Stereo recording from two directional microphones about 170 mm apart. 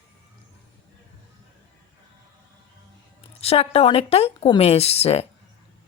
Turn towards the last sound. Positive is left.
turn(degrees=35)  # may be behind; listen again after turning